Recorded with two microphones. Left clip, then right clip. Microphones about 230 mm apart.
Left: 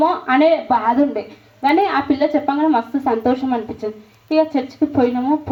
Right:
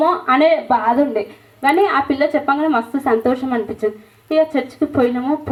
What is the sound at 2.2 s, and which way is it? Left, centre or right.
A woman's voice, right.